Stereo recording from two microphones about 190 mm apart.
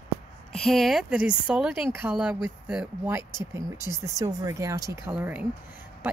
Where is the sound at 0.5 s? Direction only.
Centre (ahead or behind).